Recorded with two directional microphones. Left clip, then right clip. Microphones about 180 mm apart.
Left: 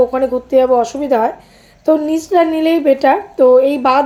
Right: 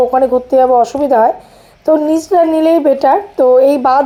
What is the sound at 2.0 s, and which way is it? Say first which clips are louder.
Speech: right 4 dB; 35° right (ahead or behind).